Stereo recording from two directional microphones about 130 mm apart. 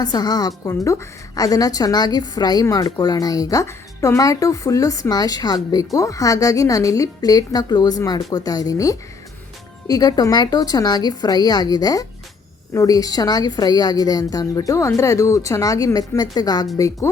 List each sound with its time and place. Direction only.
0.0 s a woman's voice: 30° left (ahead or behind)